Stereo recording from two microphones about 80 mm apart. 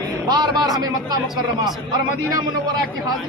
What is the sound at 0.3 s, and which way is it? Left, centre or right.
Speech, right.